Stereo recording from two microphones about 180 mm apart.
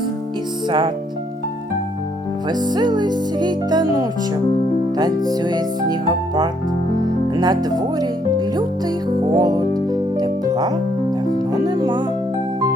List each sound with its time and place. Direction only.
2.5 s music: 25° right (ahead or behind)
4.9 s music: 20° right (ahead or behind)